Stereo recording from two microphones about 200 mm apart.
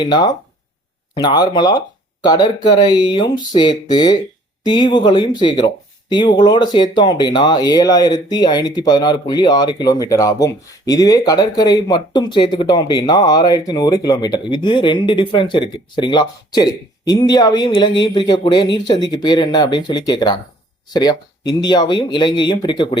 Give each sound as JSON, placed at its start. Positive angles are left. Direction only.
{"t": 0.0, "sound": "speech", "side_deg": 20}